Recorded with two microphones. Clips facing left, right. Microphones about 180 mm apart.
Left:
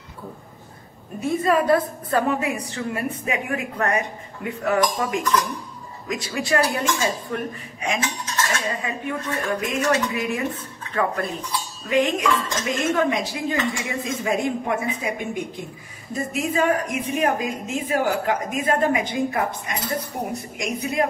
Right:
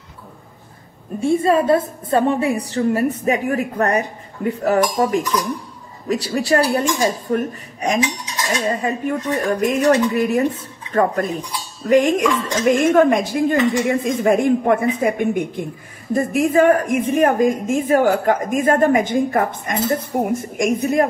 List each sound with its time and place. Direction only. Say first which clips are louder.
1.2 s a woman's voice: right 4 dB; 30° right (ahead or behind)
5.2 s speech: even; 10° right (ahead or behind)
6.0 s a woman's voice: right 7 dB; 35° right (ahead or behind)
8.0 s cutlery: right 4 dB; 15° right (ahead or behind)
8.6 s a woman's voice: right 7 dB; 40° right (ahead or behind)